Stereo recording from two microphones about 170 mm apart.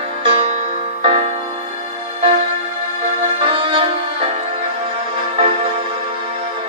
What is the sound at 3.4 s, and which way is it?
Music, 30° right (ahead or behind).